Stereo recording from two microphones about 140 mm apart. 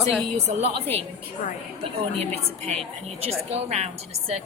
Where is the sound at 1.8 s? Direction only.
50° right (ahead or behind).